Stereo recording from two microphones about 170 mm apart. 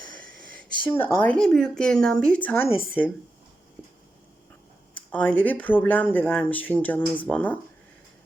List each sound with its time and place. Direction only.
0.8 s speech: 30° left (ahead or behind)
1.0 s speech: 10° left (ahead or behind)
5.1 s speech: 10° left (ahead or behind)